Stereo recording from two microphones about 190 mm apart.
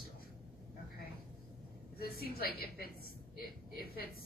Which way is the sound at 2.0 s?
55° left (ahead or behind).